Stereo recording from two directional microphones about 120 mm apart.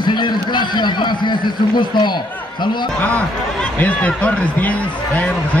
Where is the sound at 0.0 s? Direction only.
40° left (ahead or behind).